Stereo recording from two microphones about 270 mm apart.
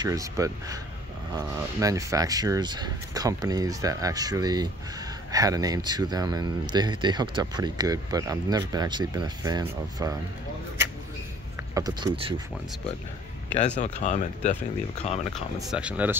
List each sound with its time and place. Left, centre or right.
0.0 s speech: centre
11.7 s speech: centre
13.6 s speech: left
15.7 s speech: centre